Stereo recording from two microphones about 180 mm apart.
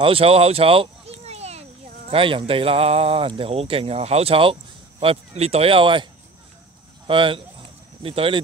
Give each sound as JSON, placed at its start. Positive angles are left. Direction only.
{"t": 0.0, "sound": "speech", "side_deg": -30}
{"t": 7.1, "sound": "speech", "side_deg": -30}